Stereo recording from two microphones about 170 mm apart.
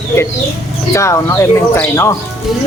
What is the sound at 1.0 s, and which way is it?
Speech, 15° left (ahead or behind).